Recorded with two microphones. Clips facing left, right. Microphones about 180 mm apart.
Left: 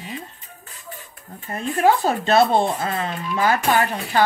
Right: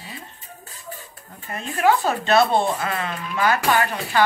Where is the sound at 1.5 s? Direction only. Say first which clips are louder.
Left 2 dB; 35° left (ahead or behind).